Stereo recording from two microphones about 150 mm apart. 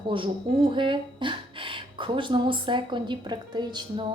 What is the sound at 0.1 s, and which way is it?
Speech, 35° right (ahead or behind).